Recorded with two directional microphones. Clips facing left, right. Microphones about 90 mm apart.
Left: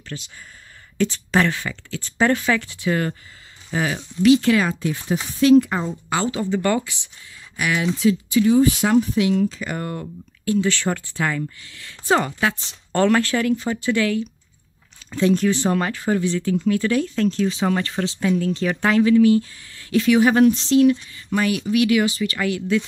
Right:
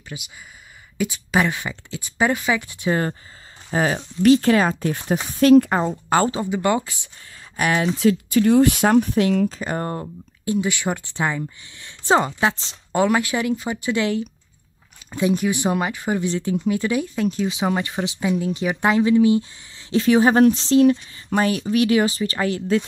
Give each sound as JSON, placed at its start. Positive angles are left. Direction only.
{"t": 0.1, "sound": "speech", "side_deg": -10}
{"t": 2.9, "sound": "speech", "side_deg": -25}
{"t": 3.7, "sound": "speech", "side_deg": -35}
{"t": 6.4, "sound": "speech", "side_deg": -15}
{"t": 7.5, "sound": "speech", "side_deg": -40}
{"t": 9.5, "sound": "speech", "side_deg": -35}
{"t": 10.4, "sound": "speech", "side_deg": -15}
{"t": 12.9, "sound": "speech", "side_deg": -10}
{"t": 20.0, "sound": "speech", "side_deg": -35}